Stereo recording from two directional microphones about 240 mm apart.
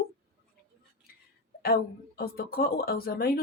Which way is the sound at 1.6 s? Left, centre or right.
Left.